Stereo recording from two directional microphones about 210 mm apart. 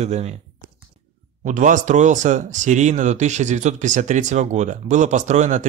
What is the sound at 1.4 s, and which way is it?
Speech, 35° right (ahead or behind).